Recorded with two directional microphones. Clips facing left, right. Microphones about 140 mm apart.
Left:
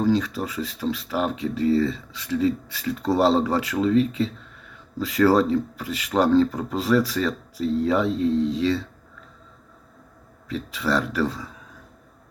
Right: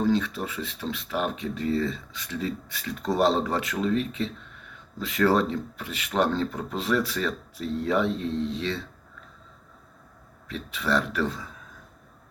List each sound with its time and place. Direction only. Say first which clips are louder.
0.0 s speech: left 3 dB; 35° left (ahead or behind)
10.5 s speech: left 2 dB; 35° left (ahead or behind)